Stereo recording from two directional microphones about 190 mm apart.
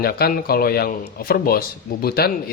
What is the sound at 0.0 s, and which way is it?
Speech, 55° left (ahead or behind).